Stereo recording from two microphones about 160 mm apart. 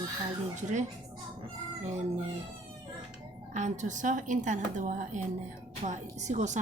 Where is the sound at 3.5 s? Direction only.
50° right (ahead or behind).